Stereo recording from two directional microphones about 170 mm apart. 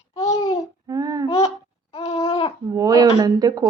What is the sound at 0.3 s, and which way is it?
Babbling, 25° left (ahead or behind).